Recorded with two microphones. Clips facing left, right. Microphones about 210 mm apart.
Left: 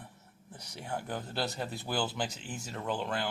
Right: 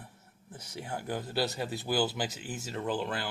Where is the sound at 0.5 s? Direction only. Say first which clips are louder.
Even; 5° right (ahead or behind).